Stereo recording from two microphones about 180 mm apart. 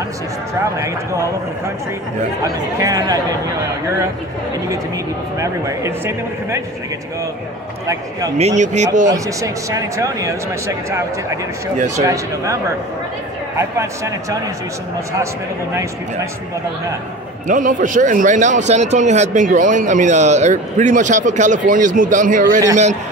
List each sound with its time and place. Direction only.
0.7 s speech: 15° right (ahead or behind)
2.4 s speech: 20° right (ahead or behind)
4.6 s speech: 20° right (ahead or behind)
7.8 s speech: 20° right (ahead or behind)
8.4 s speech: 40° right (ahead or behind)
9.1 s speech: 20° right (ahead or behind)
13.6 s speech: 15° right (ahead or behind)
17.5 s a man's voice: 45° right (ahead or behind)